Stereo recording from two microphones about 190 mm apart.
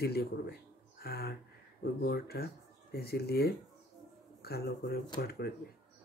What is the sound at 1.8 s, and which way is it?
Speech, 55° left (ahead or behind).